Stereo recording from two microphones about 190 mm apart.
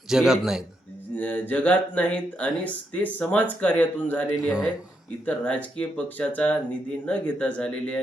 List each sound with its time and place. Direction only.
0.1 s a man's voice: centre (ahead or behind)
1.1 s speech: 10° left (ahead or behind)
4.4 s a man's voice: 5° right (ahead or behind)
5.2 s speech: 5° left (ahead or behind)